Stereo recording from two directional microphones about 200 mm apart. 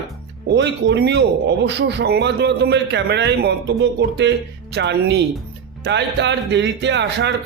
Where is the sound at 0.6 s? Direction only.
60° right (ahead or behind).